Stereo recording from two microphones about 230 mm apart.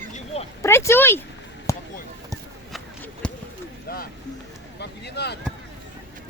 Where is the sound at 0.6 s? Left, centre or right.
Centre.